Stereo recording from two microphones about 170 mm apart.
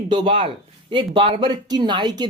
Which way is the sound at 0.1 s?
30° right (ahead or behind).